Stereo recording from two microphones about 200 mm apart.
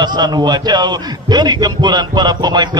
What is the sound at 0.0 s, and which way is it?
A man's voice, 20° right (ahead or behind).